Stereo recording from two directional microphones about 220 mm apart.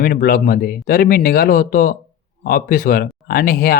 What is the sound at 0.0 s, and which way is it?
Speech, 40° left (ahead or behind).